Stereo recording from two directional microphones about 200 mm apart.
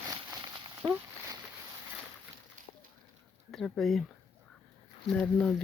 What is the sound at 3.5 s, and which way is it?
Speech, centre (ahead or behind).